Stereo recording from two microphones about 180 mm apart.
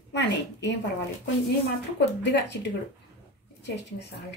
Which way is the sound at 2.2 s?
70° left (ahead or behind).